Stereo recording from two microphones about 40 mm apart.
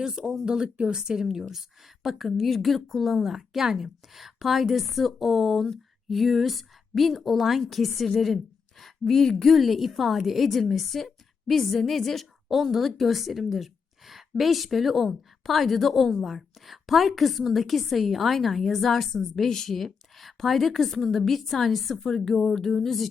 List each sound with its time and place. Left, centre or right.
0.0 s a woman's voice: centre